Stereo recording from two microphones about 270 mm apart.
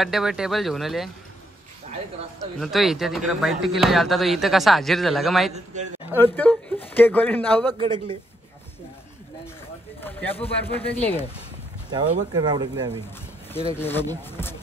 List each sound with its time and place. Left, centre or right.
0.0 s speech: centre
2.6 s a man's voice: centre
10.0 s a man's voice: centre
11.9 s speech: centre
13.7 s a man's voice: centre